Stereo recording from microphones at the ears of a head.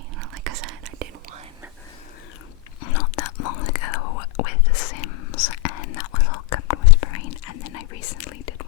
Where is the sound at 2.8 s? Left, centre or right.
Left.